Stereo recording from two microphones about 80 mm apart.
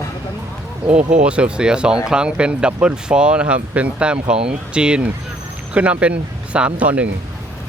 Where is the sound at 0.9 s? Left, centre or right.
Centre.